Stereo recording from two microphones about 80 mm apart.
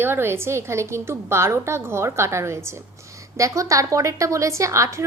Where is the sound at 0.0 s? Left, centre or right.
Right.